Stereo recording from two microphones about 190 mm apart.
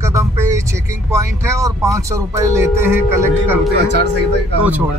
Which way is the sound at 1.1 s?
15° right (ahead or behind).